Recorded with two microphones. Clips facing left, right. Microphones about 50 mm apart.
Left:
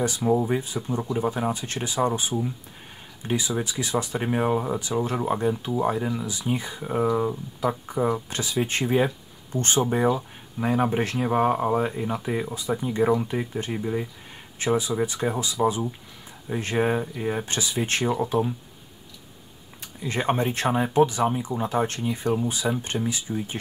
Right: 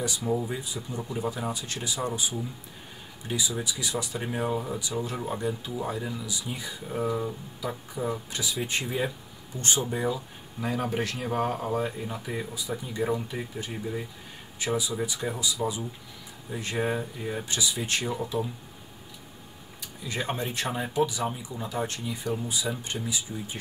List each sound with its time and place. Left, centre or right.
0.3 s speech: left
14.6 s speech: left
16.9 s speech: left
17.5 s speech: left
20.0 s speech: left